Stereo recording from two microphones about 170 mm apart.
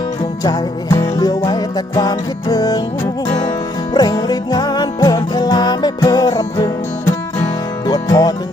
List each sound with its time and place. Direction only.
0.4 s music: 20° left (ahead or behind)